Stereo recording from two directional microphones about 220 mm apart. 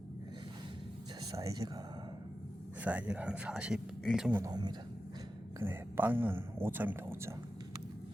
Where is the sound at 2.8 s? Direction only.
5° right (ahead or behind).